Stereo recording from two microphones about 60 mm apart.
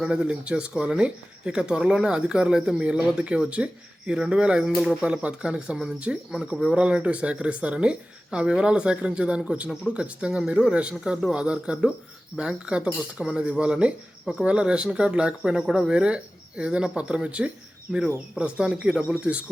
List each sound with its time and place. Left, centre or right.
0.0 s speech: centre
15.9 s speech: centre
17.9 s speech: centre
18.6 s speech: centre